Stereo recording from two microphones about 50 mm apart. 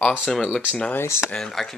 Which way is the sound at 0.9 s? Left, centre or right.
Left.